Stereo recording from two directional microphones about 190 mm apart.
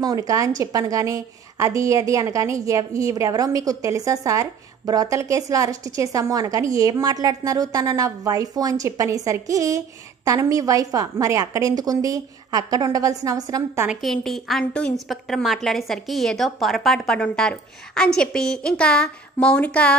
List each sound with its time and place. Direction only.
0.0 s a woman's voice: 20° right (ahead or behind)
13.8 s a woman's voice: centre (ahead or behind)